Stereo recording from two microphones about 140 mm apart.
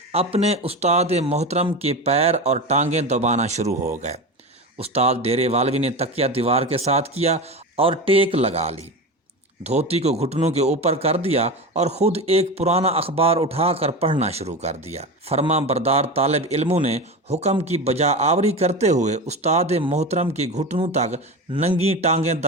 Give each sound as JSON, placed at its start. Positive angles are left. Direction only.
{"t": 0.1, "sound": "speech", "side_deg": -45}
{"t": 9.9, "sound": "speech", "side_deg": -50}